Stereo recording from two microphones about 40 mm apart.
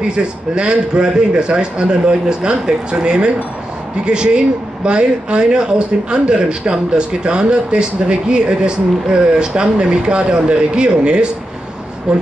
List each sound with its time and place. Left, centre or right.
0.6 s a man's voice: right